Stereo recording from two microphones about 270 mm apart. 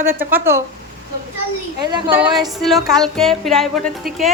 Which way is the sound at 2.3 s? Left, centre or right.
Centre.